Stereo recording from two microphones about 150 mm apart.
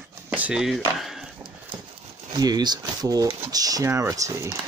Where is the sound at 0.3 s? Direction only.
10° right (ahead or behind).